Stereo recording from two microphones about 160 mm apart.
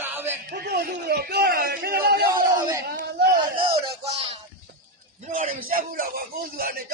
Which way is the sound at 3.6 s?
40° right (ahead or behind).